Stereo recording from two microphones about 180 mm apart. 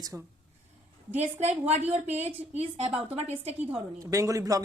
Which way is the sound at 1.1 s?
40° right (ahead or behind).